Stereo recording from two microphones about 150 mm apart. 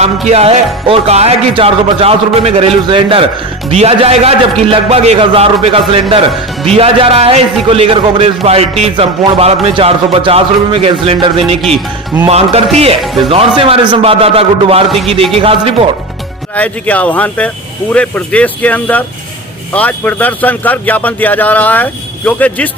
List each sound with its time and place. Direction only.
0.0 s music: 45° right (ahead or behind)
12.3 s speech: 45° right (ahead or behind)
13.6 s music: 35° right (ahead or behind)
16.6 s a man's voice: 10° left (ahead or behind)